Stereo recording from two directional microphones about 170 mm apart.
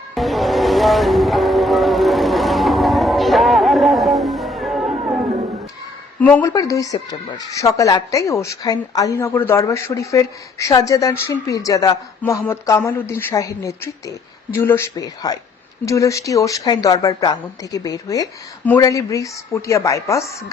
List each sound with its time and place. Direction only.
0.1 s music: centre (ahead or behind)
6.1 s a woman's voice: 10° left (ahead or behind)